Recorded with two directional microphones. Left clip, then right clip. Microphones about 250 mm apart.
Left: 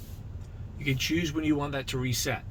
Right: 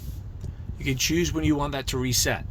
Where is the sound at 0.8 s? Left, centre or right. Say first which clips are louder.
Right 4 dB; right.